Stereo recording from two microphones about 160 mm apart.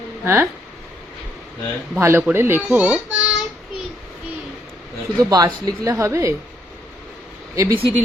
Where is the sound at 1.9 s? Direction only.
15° right (ahead or behind).